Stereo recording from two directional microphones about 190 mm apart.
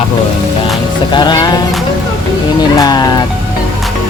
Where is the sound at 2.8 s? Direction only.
20° left (ahead or behind).